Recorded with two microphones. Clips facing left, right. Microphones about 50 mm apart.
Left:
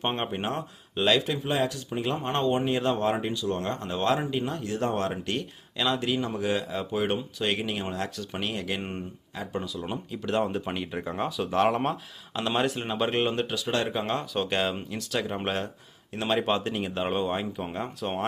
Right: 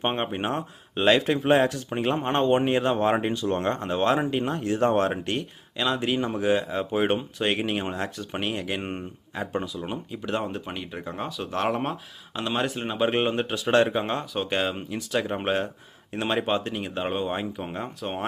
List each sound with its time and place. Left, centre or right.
0.0 s speech: centre
1.3 s speech: right
5.3 s speech: centre
6.0 s speech: right
9.7 s speech: centre
13.1 s speech: centre
13.5 s speech: right
13.8 s speech: centre
16.4 s speech: centre